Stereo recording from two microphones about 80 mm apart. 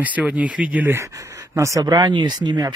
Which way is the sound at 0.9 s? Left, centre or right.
Right.